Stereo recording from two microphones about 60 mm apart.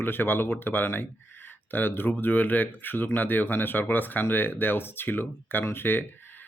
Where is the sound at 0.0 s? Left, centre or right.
Left.